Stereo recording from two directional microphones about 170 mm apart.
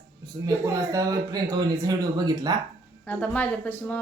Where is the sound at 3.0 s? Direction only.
10° left (ahead or behind).